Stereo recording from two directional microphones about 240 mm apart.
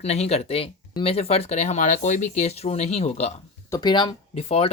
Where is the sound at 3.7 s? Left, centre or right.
Centre.